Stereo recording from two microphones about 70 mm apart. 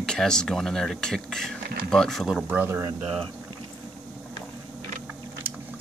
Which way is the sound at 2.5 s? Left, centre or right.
Right.